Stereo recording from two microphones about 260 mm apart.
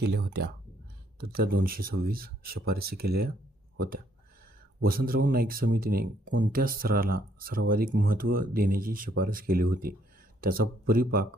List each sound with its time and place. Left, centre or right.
0.0 s speech: right
4.8 s speech: right